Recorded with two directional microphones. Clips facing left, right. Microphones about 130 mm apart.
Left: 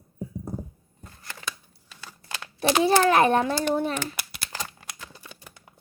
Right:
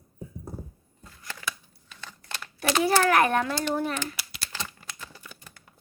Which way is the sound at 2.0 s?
10° left (ahead or behind).